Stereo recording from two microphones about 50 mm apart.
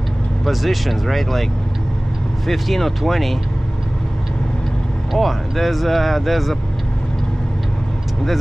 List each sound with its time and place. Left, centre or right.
0.5 s speech: centre
5.1 s speech: centre